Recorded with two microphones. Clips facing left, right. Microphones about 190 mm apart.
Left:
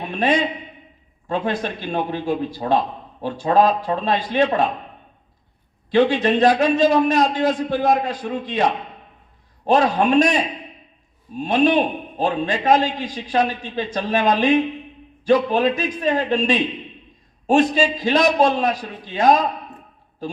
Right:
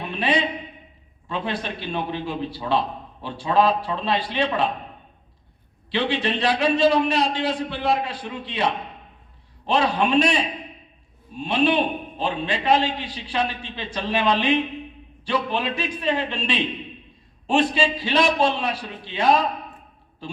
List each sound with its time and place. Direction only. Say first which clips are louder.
0.0 s a man's voice: left 4 dB; 45° left (ahead or behind)
5.9 s a man's voice: left 7 dB; 45° left (ahead or behind)